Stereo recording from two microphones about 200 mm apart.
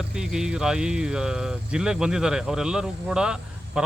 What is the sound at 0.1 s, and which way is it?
Speech, 5° right (ahead or behind).